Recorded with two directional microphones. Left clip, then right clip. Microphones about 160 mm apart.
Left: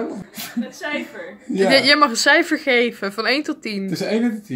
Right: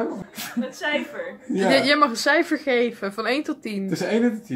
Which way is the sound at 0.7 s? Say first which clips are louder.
Right 3 dB; 5° right (ahead or behind).